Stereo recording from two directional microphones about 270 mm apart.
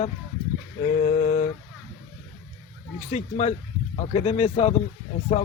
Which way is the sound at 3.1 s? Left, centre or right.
Left.